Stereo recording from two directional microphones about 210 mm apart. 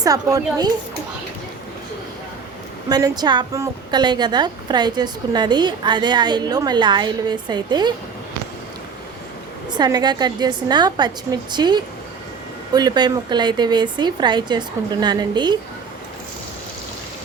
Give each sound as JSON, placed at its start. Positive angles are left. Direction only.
{"t": 0.0, "sound": "a woman's voice", "side_deg": -15}
{"t": 2.9, "sound": "a woman's voice", "side_deg": -20}
{"t": 9.7, "sound": "a woman's voice", "side_deg": -20}